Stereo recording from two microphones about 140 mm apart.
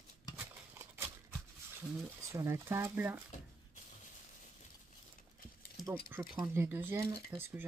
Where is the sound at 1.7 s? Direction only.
20° right (ahead or behind).